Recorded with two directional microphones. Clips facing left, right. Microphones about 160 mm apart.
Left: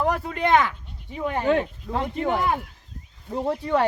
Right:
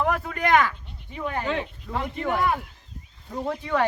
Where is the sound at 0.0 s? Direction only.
30° left (ahead or behind).